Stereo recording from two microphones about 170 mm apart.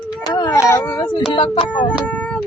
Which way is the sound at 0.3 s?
20° left (ahead or behind).